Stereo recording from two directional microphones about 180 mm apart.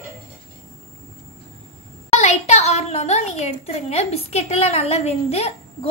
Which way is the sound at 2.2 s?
40° left (ahead or behind).